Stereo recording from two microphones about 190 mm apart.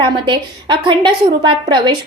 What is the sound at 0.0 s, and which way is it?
A woman's voice, 25° right (ahead or behind).